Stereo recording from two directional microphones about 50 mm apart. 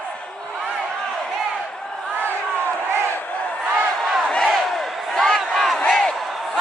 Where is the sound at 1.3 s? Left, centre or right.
Centre.